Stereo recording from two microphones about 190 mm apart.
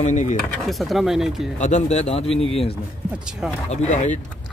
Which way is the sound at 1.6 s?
40° left (ahead or behind).